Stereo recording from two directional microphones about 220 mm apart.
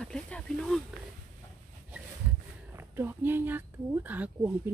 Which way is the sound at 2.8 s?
10° right (ahead or behind).